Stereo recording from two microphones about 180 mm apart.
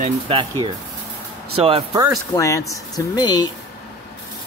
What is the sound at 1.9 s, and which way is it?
Speech, 20° right (ahead or behind).